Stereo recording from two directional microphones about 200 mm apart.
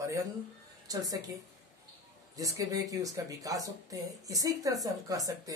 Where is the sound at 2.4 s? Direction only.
15° right (ahead or behind).